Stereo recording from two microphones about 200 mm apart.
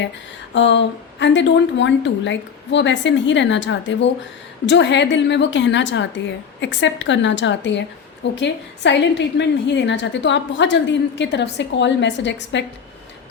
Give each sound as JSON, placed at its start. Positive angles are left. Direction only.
{"t": 0.5, "sound": "a woman's voice", "side_deg": 65}